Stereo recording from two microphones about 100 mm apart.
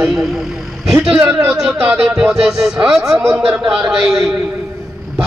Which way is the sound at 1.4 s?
5° right (ahead or behind).